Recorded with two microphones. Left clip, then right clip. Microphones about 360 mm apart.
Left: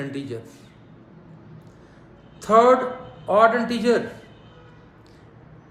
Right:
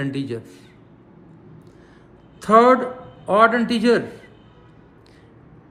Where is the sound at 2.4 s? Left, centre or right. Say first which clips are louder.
Right 2 dB; right.